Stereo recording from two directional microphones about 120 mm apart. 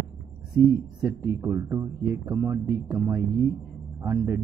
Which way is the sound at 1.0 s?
25° right (ahead or behind).